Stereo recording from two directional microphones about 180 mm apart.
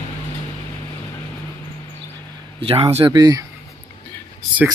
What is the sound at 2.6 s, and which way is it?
Speech, 30° right (ahead or behind).